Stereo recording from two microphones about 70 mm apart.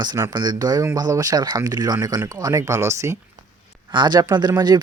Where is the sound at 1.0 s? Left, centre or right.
Right.